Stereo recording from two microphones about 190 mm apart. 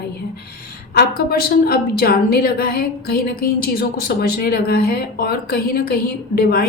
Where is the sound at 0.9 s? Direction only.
55° left (ahead or behind).